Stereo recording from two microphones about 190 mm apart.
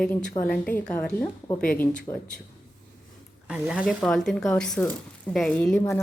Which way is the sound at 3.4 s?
5° right (ahead or behind).